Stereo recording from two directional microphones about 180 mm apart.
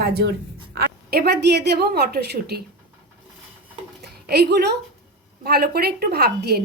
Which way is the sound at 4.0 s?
65° right (ahead or behind).